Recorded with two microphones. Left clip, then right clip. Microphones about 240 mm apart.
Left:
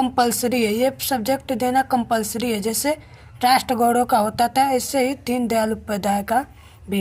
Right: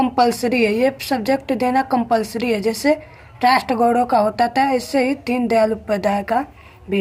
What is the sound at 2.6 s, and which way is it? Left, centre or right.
Speech, left.